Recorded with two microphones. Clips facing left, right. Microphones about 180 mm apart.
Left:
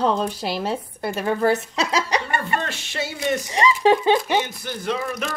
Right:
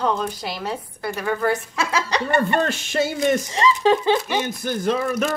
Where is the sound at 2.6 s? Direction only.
45° right (ahead or behind).